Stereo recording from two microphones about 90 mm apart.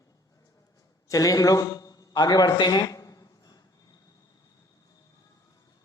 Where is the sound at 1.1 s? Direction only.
40° left (ahead or behind).